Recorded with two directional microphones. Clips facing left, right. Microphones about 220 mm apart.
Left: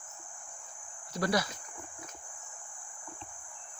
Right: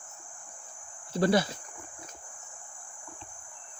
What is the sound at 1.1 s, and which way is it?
Speech, 30° right (ahead or behind).